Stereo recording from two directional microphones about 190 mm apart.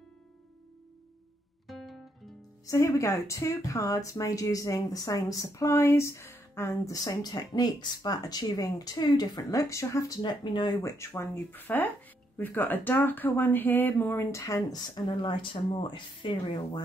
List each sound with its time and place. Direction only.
1.7 s guitar: centre (ahead or behind)
2.6 s speech: 15° left (ahead or behind)